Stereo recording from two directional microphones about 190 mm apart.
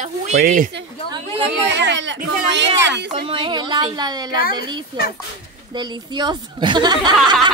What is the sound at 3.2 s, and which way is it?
A woman's voice, 25° right (ahead or behind).